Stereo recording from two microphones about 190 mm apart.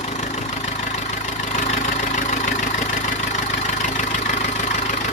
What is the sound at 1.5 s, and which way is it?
Vehicle, 40° left (ahead or behind).